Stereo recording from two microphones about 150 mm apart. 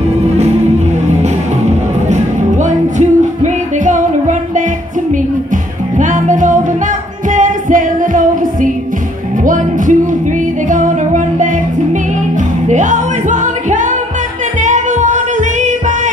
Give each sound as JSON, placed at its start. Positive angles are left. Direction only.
{"t": 2.0, "sound": "music", "side_deg": -55}
{"t": 5.9, "sound": "music", "side_deg": -55}
{"t": 12.6, "sound": "music", "side_deg": -55}